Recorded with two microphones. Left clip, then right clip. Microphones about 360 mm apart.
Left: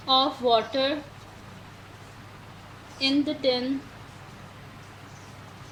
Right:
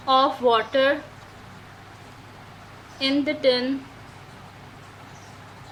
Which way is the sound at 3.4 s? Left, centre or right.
Right.